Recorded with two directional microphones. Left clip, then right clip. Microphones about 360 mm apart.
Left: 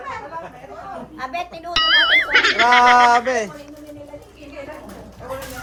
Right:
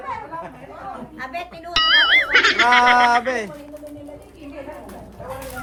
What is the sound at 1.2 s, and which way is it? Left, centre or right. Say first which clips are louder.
Doorbell: left 3 dB; centre.